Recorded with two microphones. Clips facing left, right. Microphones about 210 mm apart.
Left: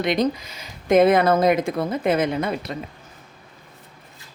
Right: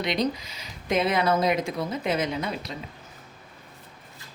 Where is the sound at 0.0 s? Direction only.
50° left (ahead or behind).